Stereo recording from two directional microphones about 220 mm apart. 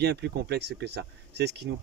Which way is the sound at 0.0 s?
50° right (ahead or behind).